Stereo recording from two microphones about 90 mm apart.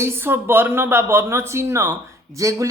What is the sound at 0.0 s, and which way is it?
Speech, 25° right (ahead or behind).